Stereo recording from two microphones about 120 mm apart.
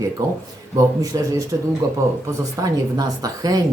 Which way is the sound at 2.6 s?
30° right (ahead or behind).